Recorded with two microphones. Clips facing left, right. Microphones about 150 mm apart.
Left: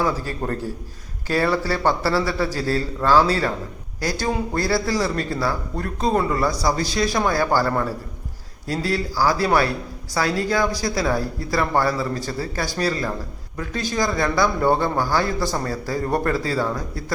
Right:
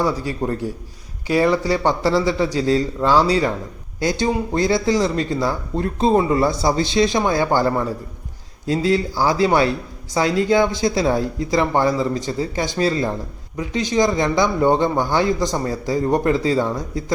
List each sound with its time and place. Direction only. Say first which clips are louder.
0.0 s a man's voice: right 2 dB; 15° right (ahead or behind)